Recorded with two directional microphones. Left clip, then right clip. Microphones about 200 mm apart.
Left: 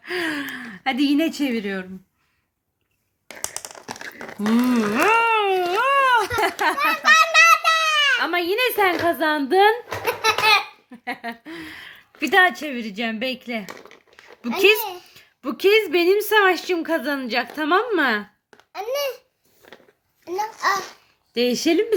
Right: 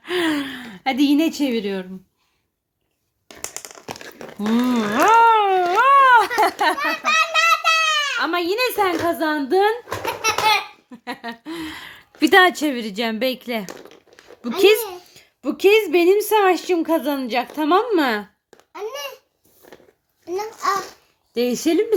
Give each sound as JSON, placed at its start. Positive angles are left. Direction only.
{"t": 0.0, "sound": "a sound", "side_deg": -10}
{"t": 4.4, "sound": "a sound", "side_deg": 5}
{"t": 6.9, "sound": "a sound", "side_deg": 45}
{"t": 8.2, "sound": "a woman's voice", "side_deg": 0}
{"t": 10.2, "sound": "laughter", "side_deg": 30}
{"t": 10.9, "sound": "a woman's voice", "side_deg": 0}
{"t": 11.6, "sound": "a woman's voice", "side_deg": -20}
{"t": 14.4, "sound": "a woman's voice", "side_deg": -5}
{"t": 18.7, "sound": "babbling", "side_deg": 45}
{"t": 21.3, "sound": "speech", "side_deg": 5}